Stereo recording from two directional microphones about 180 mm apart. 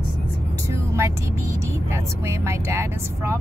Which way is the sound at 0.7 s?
15° right (ahead or behind).